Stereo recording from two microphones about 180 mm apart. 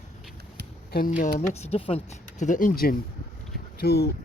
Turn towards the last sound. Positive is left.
turn(degrees=60)  # may be behind; listen again after turning